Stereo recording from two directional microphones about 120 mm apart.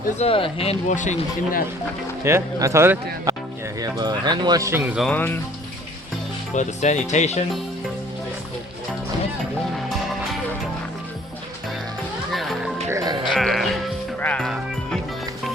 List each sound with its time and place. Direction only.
0.2 s speech: 50° left (ahead or behind)
0.9 s speech: 90° left
2.2 s speech: 25° right (ahead or behind)
3.3 s music: 30° right (ahead or behind)
3.8 s speech: 35° right (ahead or behind)
4.6 s speech: 20° right (ahead or behind)
5.1 s speech: 15° left (ahead or behind)
6.6 s music: 75° left (ahead or behind)
12.3 s music: centre (ahead or behind)
12.9 s music: 30° right (ahead or behind)
13.2 s music: 5° left (ahead or behind)
14.2 s music: 10° left (ahead or behind)
14.4 s music: centre (ahead or behind)